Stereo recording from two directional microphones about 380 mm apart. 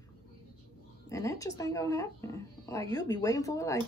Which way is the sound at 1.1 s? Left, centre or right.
Centre.